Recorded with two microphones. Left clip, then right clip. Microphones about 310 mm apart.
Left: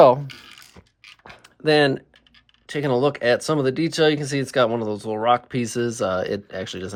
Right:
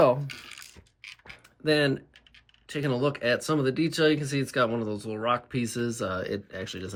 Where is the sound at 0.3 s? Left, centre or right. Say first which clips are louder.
Even; centre.